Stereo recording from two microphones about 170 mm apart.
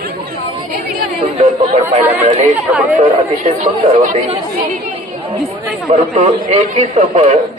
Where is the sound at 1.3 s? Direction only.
45° right (ahead or behind).